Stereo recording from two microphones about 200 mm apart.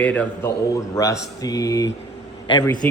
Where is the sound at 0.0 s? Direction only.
5° left (ahead or behind).